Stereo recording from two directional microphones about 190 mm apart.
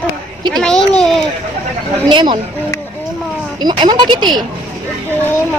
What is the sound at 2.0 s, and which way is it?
Speech, 25° right (ahead or behind).